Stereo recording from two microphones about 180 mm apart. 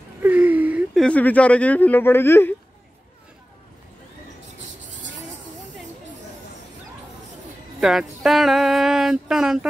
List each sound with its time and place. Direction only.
0.2 s a sound: 10° right (ahead or behind)
1.0 s speech: 10° left (ahead or behind)
7.8 s speech: centre (ahead or behind)